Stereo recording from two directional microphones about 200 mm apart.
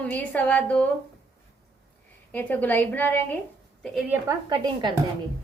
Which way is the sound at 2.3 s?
10° left (ahead or behind).